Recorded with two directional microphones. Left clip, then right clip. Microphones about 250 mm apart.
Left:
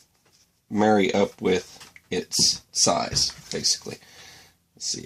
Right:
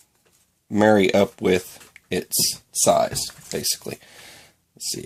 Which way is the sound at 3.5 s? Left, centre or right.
Right.